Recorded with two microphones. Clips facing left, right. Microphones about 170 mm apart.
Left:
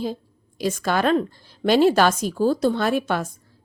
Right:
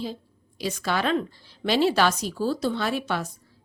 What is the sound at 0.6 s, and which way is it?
A woman's voice, 50° left (ahead or behind).